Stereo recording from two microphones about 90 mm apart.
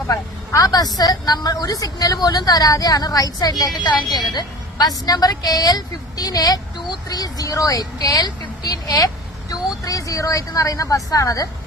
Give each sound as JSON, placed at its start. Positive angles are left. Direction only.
{"t": 0.1, "sound": "a woman's voice", "side_deg": 40}